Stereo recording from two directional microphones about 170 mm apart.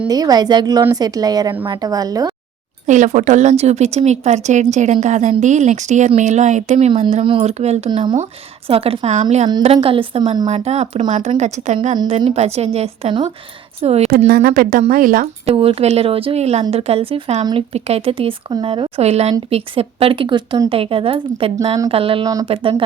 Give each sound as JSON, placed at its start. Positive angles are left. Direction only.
{"t": 0.1, "sound": "a woman's voice", "side_deg": -20}
{"t": 2.8, "sound": "a woman's voice", "side_deg": -45}
{"t": 7.9, "sound": "a woman's voice", "side_deg": -25}
{"t": 10.4, "sound": "a woman's voice", "side_deg": -40}
{"t": 14.3, "sound": "speech", "side_deg": -55}
{"t": 15.4, "sound": "speech", "side_deg": -35}